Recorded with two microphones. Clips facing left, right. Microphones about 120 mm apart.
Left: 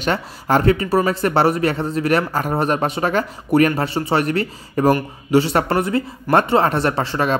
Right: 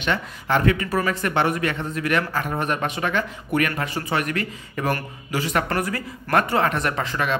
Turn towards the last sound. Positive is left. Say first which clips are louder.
# left 5 dB
turn(degrees=35)  # may be behind; listen again after turning